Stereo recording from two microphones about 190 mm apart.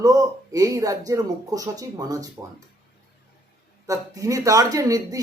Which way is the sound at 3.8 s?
15° right (ahead or behind).